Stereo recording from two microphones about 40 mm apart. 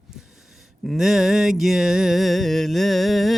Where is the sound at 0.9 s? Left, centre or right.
Centre.